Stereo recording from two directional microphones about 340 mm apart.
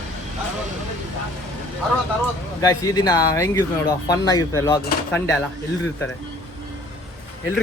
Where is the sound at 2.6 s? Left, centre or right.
Centre.